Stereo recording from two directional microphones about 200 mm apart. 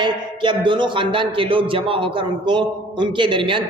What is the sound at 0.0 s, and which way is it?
Speech, 25° right (ahead or behind).